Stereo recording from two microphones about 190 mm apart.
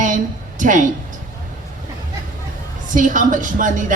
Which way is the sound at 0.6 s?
45° right (ahead or behind).